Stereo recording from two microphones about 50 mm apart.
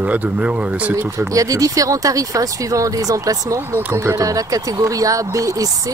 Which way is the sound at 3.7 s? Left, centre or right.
Right.